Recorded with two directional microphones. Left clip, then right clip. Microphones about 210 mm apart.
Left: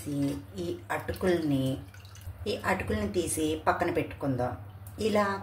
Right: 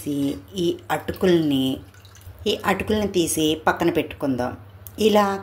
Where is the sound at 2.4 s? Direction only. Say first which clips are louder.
Right 8 dB; 40° right (ahead or behind).